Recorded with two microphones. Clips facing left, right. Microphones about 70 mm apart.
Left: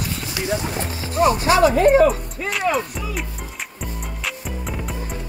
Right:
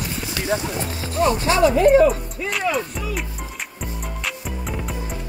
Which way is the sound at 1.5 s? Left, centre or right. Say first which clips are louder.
Even; left.